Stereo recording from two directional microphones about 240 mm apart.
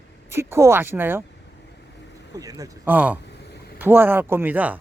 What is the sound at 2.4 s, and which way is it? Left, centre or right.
Speech, centre.